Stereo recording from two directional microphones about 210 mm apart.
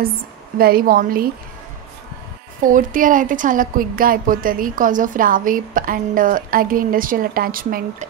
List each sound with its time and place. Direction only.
0.6 s a woman's voice: 45° right (ahead or behind)
2.6 s a woman's voice: 40° right (ahead or behind)